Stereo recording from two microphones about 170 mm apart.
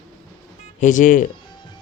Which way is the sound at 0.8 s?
50° left (ahead or behind).